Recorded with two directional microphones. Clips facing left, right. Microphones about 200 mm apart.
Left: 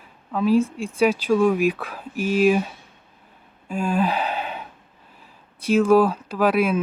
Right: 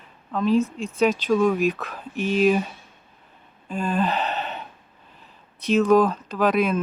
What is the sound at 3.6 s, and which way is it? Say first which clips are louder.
Gasp: left 2 dB; 10° left (ahead or behind).